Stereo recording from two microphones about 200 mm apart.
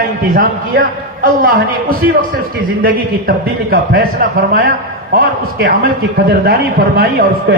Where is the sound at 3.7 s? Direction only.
50° right (ahead or behind).